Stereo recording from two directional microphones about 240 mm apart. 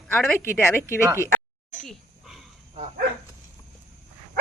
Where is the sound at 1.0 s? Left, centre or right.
Centre.